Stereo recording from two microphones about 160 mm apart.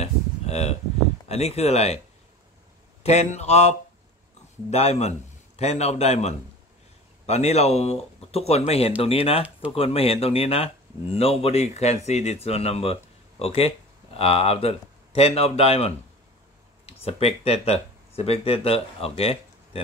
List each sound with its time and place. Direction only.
0.0 s a sound: 40° left (ahead or behind)
1.3 s speech: 40° left (ahead or behind)
3.0 s speech: 45° left (ahead or behind)